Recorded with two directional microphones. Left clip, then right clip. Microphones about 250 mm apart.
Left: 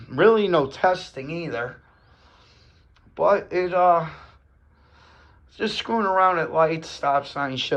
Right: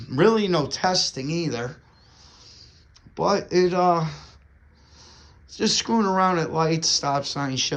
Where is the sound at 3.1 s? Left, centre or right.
Right.